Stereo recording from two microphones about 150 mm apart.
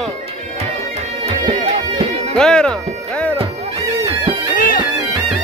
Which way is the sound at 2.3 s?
5° left (ahead or behind).